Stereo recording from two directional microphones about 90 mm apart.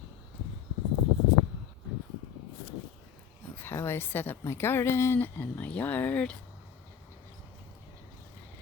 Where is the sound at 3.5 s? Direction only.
25° left (ahead or behind).